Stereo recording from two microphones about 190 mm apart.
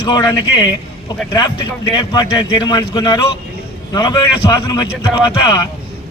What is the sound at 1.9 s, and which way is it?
A man's voice, 20° left (ahead or behind).